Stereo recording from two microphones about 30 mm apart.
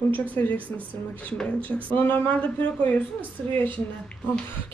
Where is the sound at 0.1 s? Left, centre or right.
Left.